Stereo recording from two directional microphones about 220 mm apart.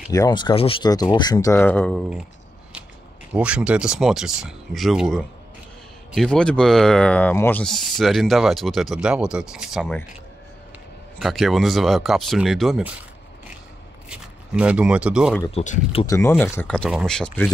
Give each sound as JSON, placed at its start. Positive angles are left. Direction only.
{"t": 0.1, "sound": "speech", "side_deg": 15}
{"t": 3.3, "sound": "speech", "side_deg": -5}
{"t": 11.1, "sound": "speech", "side_deg": 0}
{"t": 14.0, "sound": "speech", "side_deg": -5}
{"t": 15.5, "sound": "speech", "side_deg": 30}
{"t": 16.1, "sound": "speech", "side_deg": 10}